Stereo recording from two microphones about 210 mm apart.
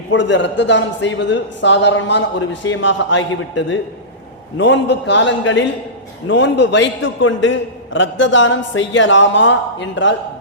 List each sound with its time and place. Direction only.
0.1 s a man's voice: 60° left (ahead or behind)